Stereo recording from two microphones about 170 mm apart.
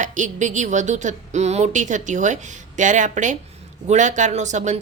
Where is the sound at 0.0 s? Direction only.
45° right (ahead or behind).